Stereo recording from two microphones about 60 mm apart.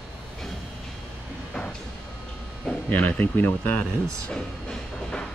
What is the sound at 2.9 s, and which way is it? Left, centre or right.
Speech, left.